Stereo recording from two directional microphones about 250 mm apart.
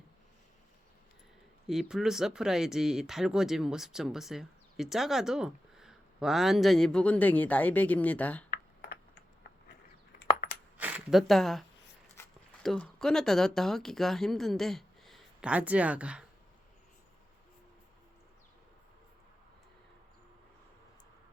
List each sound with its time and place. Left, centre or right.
1.6 s speech: centre
8.4 s computer keyboard: left
10.2 s coin: left
10.8 s a sound: centre
12.6 s speech: centre